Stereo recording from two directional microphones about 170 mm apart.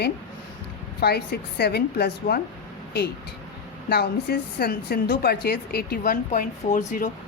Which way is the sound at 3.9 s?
65° left (ahead or behind).